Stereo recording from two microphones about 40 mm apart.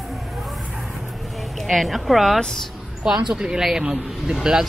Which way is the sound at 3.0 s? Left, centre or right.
Centre.